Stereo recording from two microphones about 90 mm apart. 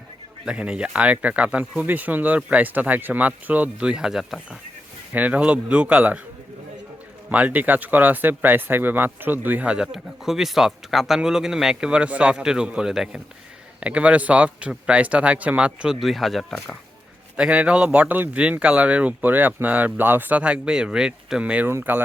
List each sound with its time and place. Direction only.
0.4 s speech: 10° right (ahead or behind)
5.1 s speech: 15° right (ahead or behind)
7.3 s speech: 20° right (ahead or behind); by 16.7 s centre (ahead or behind)
17.3 s speech: 15° right (ahead or behind)
21.7 s speech: 25° right (ahead or behind)